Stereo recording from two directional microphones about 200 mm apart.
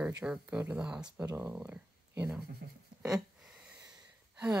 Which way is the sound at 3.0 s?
5° right (ahead or behind).